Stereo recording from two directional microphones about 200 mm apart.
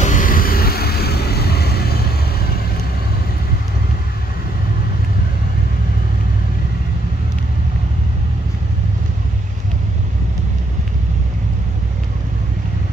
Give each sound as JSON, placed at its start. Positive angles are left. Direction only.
{"t": 0.0, "sound": "vehicle", "side_deg": 40}